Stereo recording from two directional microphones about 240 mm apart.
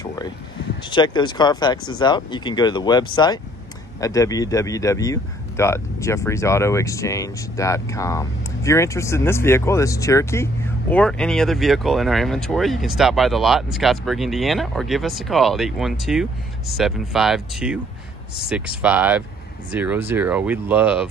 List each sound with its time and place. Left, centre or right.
0.8 s speech: centre
18.8 s speech: centre